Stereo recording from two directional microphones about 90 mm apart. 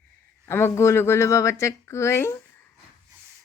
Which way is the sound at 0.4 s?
30° left (ahead or behind).